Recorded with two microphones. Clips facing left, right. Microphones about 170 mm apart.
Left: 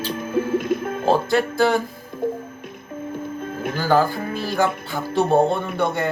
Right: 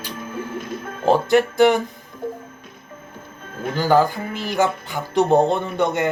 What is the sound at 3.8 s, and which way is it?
Speech, 20° right (ahead or behind).